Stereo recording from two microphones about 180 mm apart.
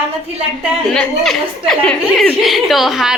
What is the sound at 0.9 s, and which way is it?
A woman's voice, 5° left (ahead or behind).